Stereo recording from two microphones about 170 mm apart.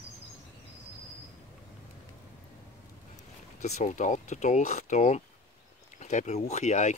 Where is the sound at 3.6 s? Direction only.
45° left (ahead or behind).